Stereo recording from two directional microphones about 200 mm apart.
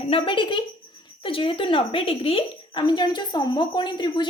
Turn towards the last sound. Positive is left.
turn(degrees=20)  # may be behind; listen again after turning